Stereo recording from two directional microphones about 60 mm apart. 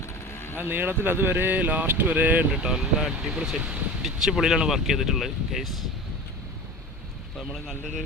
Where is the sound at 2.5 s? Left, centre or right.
Centre.